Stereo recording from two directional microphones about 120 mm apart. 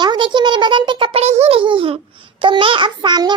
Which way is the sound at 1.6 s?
45° right (ahead or behind).